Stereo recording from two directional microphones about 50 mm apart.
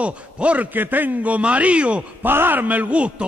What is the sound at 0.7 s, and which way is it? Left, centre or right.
A man's voice, right.